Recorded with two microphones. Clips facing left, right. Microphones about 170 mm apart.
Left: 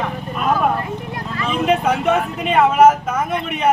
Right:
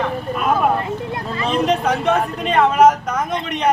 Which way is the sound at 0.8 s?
25° right (ahead or behind).